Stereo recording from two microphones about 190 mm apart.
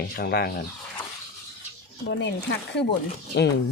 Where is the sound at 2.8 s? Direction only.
65° left (ahead or behind).